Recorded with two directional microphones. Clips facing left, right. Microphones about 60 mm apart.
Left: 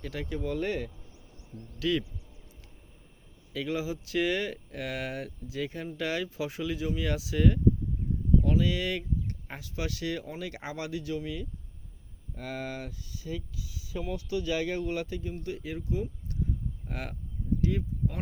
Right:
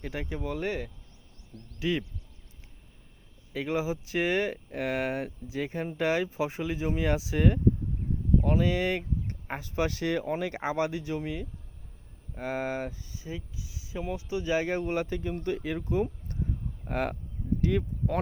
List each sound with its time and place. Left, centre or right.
0.0 s speech: right
1.5 s speech: centre
1.8 s speech: right
3.5 s speech: right
16.3 s a sound: right
17.6 s speech: right